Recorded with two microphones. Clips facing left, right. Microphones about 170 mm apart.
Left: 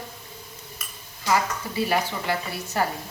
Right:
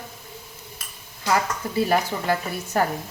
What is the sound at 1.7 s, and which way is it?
Speech, 45° right (ahead or behind).